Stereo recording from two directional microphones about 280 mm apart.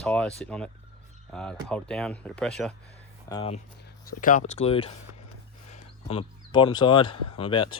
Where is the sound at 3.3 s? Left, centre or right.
Centre.